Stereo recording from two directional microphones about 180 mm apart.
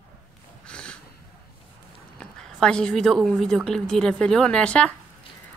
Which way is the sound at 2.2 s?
5° left (ahead or behind).